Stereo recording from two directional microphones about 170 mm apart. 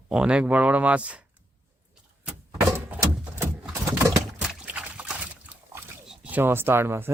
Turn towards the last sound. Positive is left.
turn(degrees=-15)  # may be behind; listen again after turning